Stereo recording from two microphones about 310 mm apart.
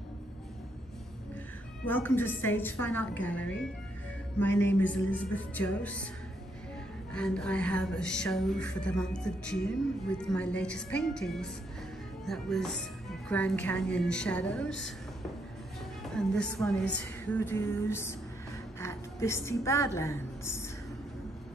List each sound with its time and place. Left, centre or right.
1.9 s speech: centre
4.5 s speech: left
5.1 s speech: centre
7.1 s speech: centre
16.0 s speech: centre
17.2 s music: centre
18.8 s a woman's voice: centre